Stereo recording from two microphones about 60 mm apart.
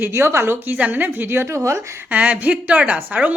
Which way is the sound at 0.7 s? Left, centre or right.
Right.